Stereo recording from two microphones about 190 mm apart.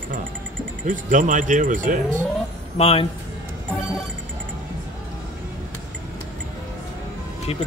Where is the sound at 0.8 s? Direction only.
45° right (ahead or behind).